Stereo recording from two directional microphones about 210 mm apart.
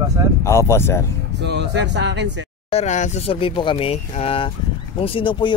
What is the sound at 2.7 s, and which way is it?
Speech, 30° left (ahead or behind).